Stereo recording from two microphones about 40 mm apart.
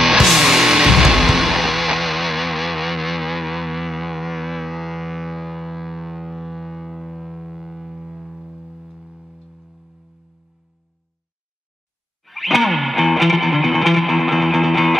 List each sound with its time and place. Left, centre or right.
0.0 s music: centre
12.3 s music: centre